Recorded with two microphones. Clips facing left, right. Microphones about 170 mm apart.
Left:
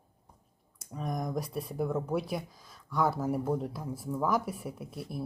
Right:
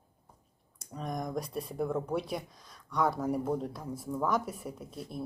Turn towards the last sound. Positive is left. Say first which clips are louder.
# left 1 dB
turn(degrees=5)  # may be behind; listen again after turning